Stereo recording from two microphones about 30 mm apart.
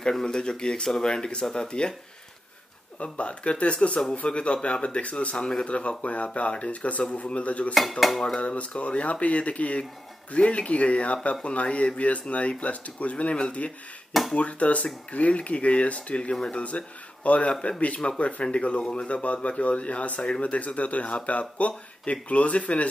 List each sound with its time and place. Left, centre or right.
0.2 s speech: left
3.0 s speech: left
17.5 s speech: left
20.2 s speech: left
20.5 s speech: left